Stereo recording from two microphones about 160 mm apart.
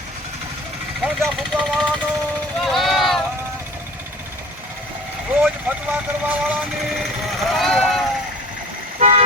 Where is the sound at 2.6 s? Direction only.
Centre (ahead or behind).